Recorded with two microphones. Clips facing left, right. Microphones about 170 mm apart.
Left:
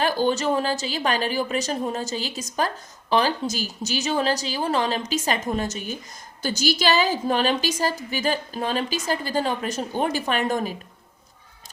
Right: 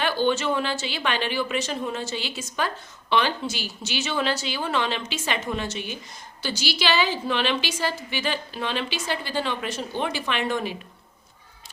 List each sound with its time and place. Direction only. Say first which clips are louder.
0.0 s a woman's voice: left 1 dB; 40° left (ahead or behind)